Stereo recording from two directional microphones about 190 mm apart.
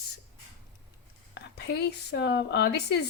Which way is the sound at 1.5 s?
60° left (ahead or behind).